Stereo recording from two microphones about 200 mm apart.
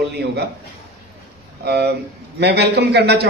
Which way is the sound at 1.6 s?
55° right (ahead or behind).